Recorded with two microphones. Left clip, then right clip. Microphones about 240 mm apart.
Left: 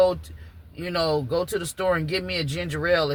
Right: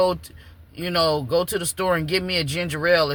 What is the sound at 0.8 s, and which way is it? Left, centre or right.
Speech, right.